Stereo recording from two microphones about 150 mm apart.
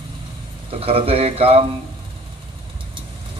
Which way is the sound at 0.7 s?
40° right (ahead or behind).